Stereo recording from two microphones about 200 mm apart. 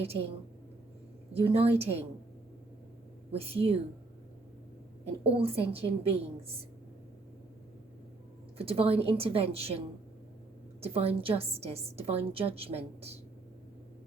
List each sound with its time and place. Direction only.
1.3 s a woman's voice: 30° right (ahead or behind)
3.3 s a woman's voice: 30° right (ahead or behind)
5.2 s a woman's voice: 30° right (ahead or behind)
8.5 s a woman's voice: 30° right (ahead or behind)
10.8 s a woman's voice: 30° right (ahead or behind)